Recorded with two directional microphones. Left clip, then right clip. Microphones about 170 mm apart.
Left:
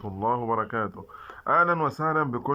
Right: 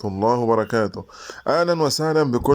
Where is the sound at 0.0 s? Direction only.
35° right (ahead or behind).